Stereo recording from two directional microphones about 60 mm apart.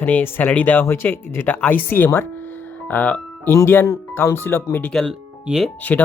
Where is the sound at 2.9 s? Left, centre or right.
Left.